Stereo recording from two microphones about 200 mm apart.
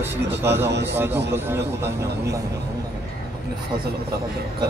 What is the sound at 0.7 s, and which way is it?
Speech, 60° right (ahead or behind).